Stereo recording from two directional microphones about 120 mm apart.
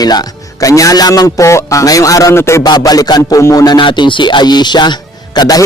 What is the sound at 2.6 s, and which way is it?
Speech, 35° left (ahead or behind).